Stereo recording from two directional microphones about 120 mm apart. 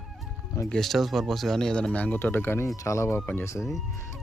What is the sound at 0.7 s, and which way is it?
Speech, centre (ahead or behind).